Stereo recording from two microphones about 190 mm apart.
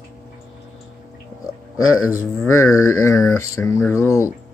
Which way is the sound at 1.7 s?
90° left.